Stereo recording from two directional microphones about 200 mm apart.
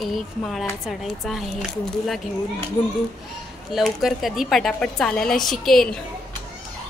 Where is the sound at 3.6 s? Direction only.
Centre (ahead or behind).